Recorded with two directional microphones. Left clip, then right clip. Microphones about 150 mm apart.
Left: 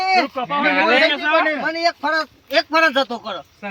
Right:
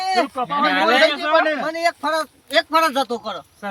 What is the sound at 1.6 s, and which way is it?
Speech, 15° right (ahead or behind).